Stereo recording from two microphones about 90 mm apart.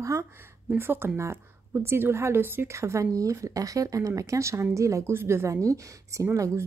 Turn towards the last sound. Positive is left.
turn(degrees=-35)  # may be behind; listen again after turning